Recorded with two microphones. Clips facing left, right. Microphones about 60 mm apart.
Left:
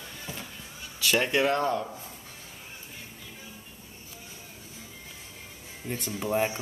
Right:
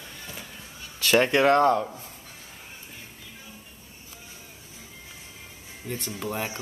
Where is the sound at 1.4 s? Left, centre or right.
Right.